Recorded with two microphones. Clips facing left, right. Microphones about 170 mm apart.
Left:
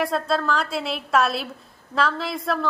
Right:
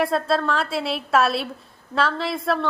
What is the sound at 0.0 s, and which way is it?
A woman's voice, centre (ahead or behind).